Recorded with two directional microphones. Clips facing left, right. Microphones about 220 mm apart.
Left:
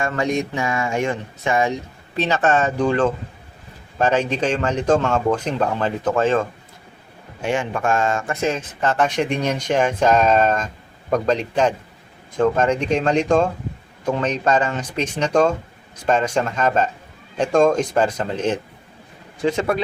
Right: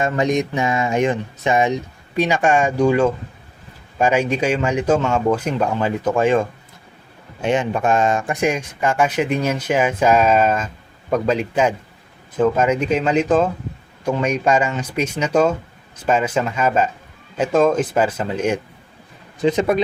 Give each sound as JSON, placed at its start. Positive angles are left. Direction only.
{"t": 0.0, "sound": "speech", "side_deg": -20}